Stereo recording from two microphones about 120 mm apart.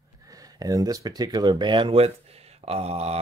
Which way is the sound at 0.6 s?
30° right (ahead or behind).